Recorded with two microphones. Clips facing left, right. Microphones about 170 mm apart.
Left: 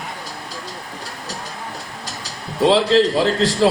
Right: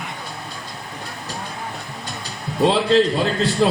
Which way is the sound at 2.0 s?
85° left.